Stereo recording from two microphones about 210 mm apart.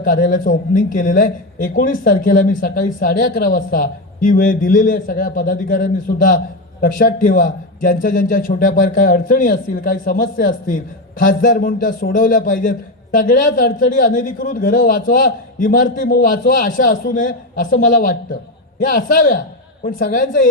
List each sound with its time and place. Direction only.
0.0 s a man's voice: 40° left (ahead or behind)
6.8 s a man's voice: 40° left (ahead or behind)